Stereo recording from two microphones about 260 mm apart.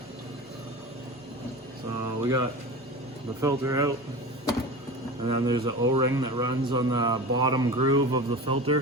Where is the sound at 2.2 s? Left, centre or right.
Centre.